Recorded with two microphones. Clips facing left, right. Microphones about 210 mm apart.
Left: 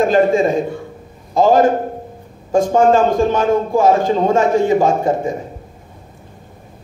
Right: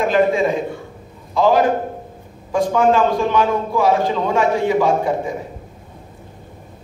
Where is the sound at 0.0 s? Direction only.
45° left (ahead or behind).